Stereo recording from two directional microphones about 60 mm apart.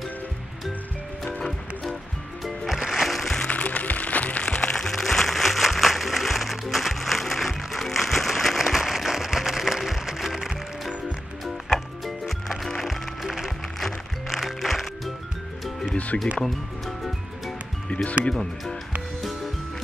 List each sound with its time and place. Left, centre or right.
2.4 s music: centre
3.4 s music: left
4.7 s music: centre
16.3 s music: centre
17.8 s music: left
18.3 s speech: centre